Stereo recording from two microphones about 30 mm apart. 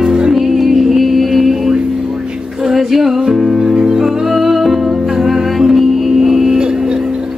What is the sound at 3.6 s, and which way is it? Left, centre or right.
Music, right.